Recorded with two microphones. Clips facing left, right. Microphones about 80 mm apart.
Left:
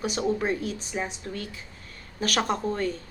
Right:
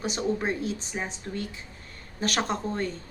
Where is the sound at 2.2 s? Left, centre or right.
Right.